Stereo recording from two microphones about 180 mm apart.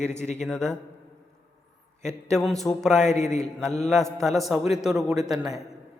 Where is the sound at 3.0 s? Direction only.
40° left (ahead or behind).